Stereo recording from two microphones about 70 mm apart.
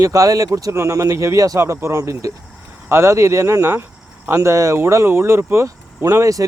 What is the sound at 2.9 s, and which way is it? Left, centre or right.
Speech, right.